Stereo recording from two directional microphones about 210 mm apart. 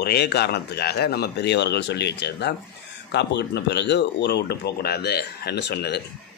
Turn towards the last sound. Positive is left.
turn(degrees=55)  # may be behind; listen again after turning